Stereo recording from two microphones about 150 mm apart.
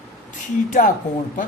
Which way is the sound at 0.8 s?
60° left (ahead or behind).